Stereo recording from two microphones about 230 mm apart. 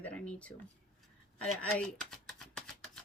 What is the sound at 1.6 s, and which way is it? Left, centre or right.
Speech, centre.